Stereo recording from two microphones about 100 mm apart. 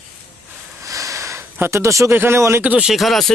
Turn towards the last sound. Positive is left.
turn(degrees=0)  # may be behind; listen again after turning